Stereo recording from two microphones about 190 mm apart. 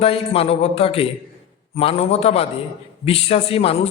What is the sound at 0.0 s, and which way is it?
A man's voice, 30° left (ahead or behind).